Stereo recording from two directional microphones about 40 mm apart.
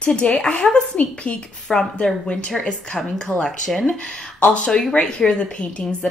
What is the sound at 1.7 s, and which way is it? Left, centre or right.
Speech, centre.